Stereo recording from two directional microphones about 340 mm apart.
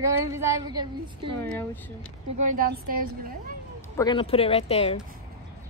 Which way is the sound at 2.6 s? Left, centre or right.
Right.